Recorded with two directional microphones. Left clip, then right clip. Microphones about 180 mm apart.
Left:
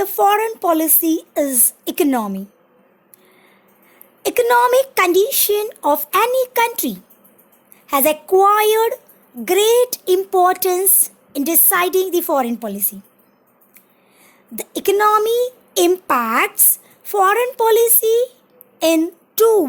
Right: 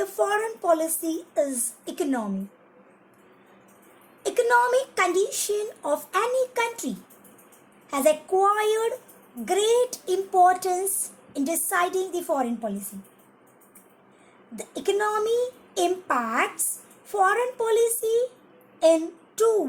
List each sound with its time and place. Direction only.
0.0 s a woman's voice: 55° left (ahead or behind)
4.2 s speech: 55° left (ahead or behind)
14.5 s speech: 55° left (ahead or behind)
18.8 s a sound: 55° left (ahead or behind)